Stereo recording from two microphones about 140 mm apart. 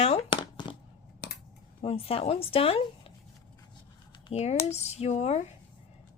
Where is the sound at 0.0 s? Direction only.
50° left (ahead or behind).